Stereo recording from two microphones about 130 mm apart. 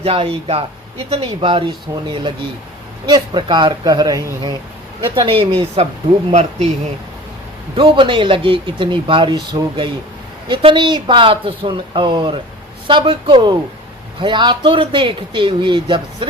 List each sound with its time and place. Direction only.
0.0 s speech: 50° right (ahead or behind); by 4.5 s 30° right (ahead or behind)
5.1 s speech: 45° right (ahead or behind)
7.8 s speech: 40° right (ahead or behind)